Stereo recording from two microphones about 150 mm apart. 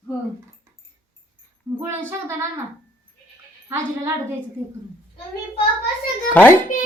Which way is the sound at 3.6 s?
20° right (ahead or behind).